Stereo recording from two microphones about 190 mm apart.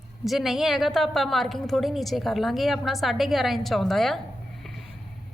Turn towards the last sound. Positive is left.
turn(degrees=0)  # may be behind; listen again after turning